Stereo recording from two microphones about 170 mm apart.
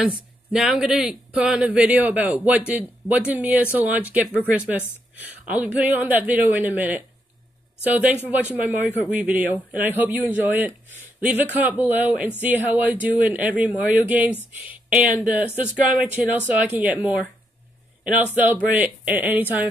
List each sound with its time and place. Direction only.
0.0 s a man's voice: 5° right (ahead or behind)